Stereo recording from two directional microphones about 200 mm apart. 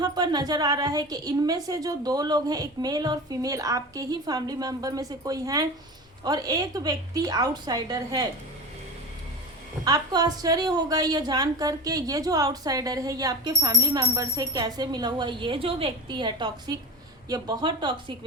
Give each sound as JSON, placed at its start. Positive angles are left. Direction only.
{"t": 0.0, "sound": "a woman's voice", "side_deg": -20}
{"t": 9.8, "sound": "a woman's voice", "side_deg": -20}